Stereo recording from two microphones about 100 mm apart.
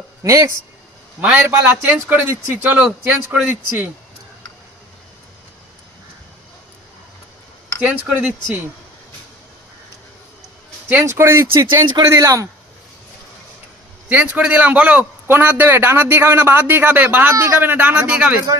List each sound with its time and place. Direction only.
0.2 s speech: 30° right (ahead or behind); by 3.9 s 15° right (ahead or behind)
7.8 s speech: 10° right (ahead or behind)
10.9 s a man's voice: 25° right (ahead or behind)
14.0 s a man's voice: 15° right (ahead or behind)